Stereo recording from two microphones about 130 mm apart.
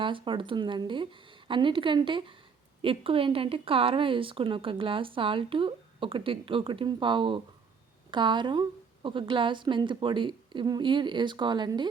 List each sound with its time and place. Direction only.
0.0 s a woman's voice: 40° right (ahead or behind)